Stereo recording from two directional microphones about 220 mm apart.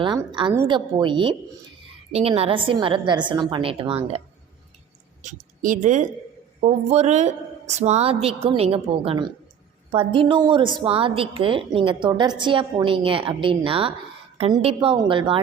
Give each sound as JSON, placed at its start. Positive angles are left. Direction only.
{"t": 0.0, "sound": "a woman's voice", "side_deg": -20}
{"t": 5.2, "sound": "a woman's voice", "side_deg": -35}